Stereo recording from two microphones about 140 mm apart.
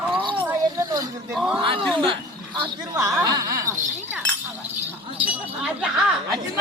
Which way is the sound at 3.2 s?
25° right (ahead or behind).